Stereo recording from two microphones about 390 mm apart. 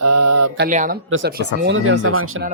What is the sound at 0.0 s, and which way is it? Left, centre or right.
Mantra, right.